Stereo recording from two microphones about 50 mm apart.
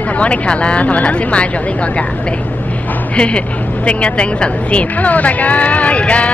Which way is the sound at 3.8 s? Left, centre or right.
Left.